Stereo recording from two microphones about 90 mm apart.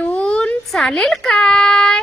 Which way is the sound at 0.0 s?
10° left (ahead or behind).